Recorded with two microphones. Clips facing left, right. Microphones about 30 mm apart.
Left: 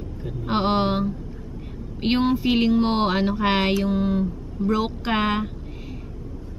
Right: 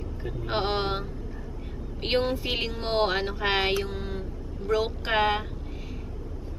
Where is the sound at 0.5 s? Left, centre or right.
Centre.